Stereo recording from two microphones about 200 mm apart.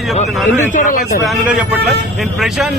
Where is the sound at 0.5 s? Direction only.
40° left (ahead or behind).